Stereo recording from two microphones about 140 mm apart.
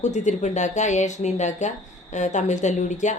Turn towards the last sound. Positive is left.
turn(degrees=60)  # may be behind; listen again after turning